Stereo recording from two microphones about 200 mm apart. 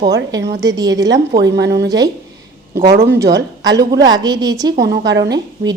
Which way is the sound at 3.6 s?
20° right (ahead or behind).